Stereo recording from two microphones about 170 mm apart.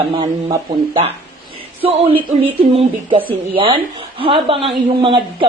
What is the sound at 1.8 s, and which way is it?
Speech, 35° right (ahead or behind).